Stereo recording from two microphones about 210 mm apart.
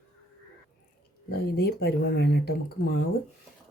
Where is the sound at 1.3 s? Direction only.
45° left (ahead or behind).